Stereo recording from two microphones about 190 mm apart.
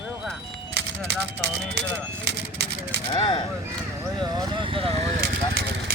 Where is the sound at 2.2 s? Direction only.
60° right (ahead or behind).